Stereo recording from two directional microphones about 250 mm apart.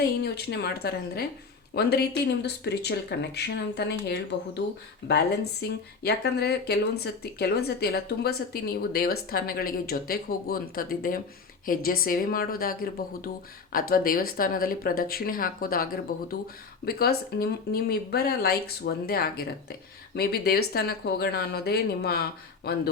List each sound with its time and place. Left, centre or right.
0.2 s speech: left
5.5 s speech: left